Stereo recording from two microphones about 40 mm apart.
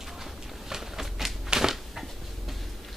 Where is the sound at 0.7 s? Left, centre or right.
Centre.